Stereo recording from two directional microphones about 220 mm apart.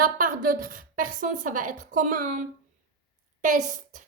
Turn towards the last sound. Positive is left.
turn(degrees=-35)  # may be behind; listen again after turning